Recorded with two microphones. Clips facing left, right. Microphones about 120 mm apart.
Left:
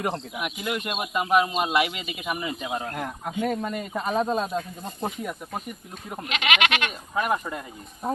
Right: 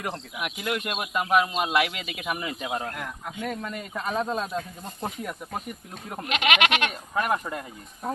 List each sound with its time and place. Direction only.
0.6 s speech: centre (ahead or behind)
2.9 s speech: 30° left (ahead or behind); by 5.3 s 5° left (ahead or behind)
6.4 s speech: 10° right (ahead or behind)
7.2 s speech: 5° left (ahead or behind)
8.0 s speech: 20° left (ahead or behind)